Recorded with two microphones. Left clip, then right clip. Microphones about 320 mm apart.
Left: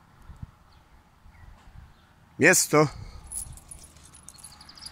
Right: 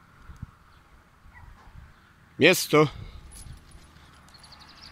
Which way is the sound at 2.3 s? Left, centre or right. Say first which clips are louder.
Even; centre.